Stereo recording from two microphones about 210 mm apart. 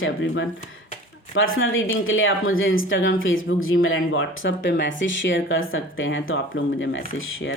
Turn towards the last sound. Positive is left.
turn(degrees=70)  # may be behind; listen again after turning